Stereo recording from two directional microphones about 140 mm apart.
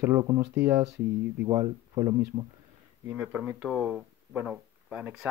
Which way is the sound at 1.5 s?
25° right (ahead or behind).